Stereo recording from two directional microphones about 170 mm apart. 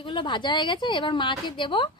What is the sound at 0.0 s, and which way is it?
A woman's voice, 30° left (ahead or behind).